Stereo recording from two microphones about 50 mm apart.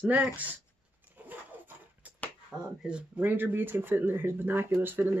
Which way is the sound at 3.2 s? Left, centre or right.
Right.